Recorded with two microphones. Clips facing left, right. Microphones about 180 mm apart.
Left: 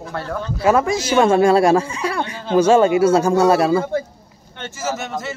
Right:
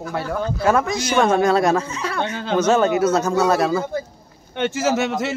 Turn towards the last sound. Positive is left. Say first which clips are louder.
# right 5 dB
turn(degrees=-75)  # may be behind; listen again after turning